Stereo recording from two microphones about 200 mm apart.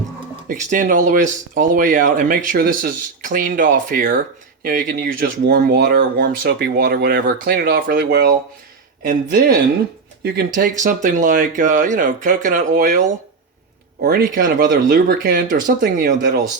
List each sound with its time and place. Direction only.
0.4 s speech: 40° right (ahead or behind)
10.2 s speech: 50° right (ahead or behind)